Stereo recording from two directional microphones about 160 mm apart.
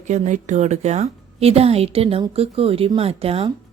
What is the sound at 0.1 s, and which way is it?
A woman's voice, 50° right (ahead or behind).